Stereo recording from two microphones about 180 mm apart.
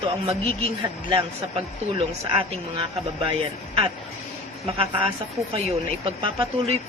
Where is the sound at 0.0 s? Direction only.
30° right (ahead or behind).